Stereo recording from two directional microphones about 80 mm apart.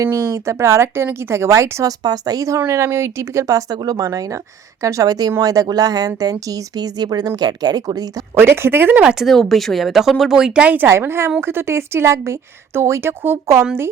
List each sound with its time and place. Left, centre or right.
0.0 s a woman's voice: right
1.8 s speech: right
2.7 s speech: right
8.4 s speech: right
9.1 s speech: centre
10.8 s a woman's voice: right